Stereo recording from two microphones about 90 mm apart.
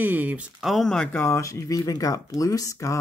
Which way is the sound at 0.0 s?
20° right (ahead or behind).